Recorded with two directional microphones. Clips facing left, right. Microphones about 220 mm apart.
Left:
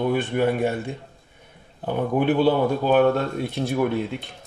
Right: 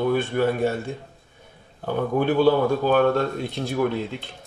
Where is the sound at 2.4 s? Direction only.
15° left (ahead or behind).